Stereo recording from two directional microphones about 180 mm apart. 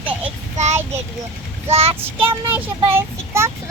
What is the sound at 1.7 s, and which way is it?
Child singing, 35° right (ahead or behind).